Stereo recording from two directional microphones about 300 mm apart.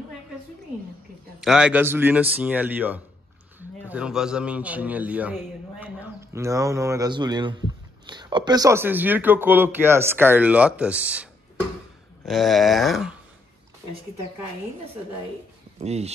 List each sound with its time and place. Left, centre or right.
1.4 s a man's voice: centre
12.3 s a man's voice: centre
15.8 s speech: right